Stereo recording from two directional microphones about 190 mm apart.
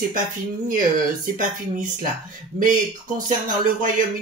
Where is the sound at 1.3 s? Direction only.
40° right (ahead or behind).